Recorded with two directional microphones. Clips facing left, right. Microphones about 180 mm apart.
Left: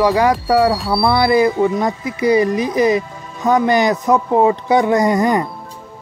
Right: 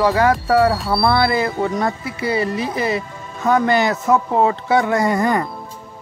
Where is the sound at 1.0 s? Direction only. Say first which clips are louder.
Left 5 dB; 15° left (ahead or behind).